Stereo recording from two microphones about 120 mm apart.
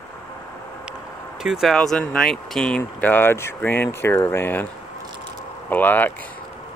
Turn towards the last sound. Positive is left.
turn(degrees=15)  # may be behind; listen again after turning